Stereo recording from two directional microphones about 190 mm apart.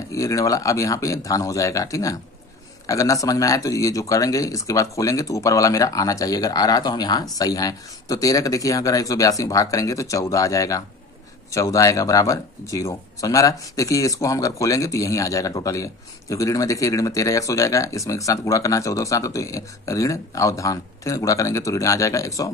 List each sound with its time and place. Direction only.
0.1 s speech: 15° left (ahead or behind)